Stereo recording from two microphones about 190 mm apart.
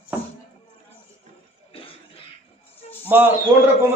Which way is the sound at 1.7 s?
30° left (ahead or behind).